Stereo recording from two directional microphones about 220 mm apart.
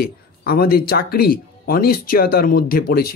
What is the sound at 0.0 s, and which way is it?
Speech, 45° left (ahead or behind).